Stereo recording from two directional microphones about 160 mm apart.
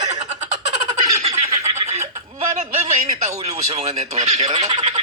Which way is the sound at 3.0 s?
45° right (ahead or behind).